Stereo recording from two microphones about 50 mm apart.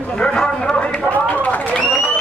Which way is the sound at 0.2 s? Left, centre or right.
Centre.